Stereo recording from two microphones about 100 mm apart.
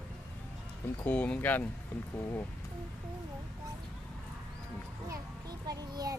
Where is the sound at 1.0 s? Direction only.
15° left (ahead or behind).